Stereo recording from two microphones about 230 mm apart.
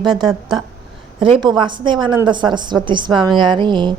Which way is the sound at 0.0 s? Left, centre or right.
Centre.